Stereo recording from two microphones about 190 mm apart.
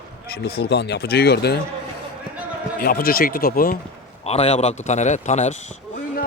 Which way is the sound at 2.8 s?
50° left (ahead or behind).